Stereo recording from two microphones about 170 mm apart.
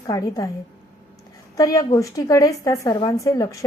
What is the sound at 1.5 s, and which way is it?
A woman's voice, 20° left (ahead or behind).